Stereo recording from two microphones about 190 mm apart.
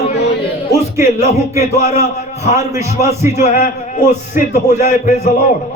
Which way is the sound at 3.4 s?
40° left (ahead or behind).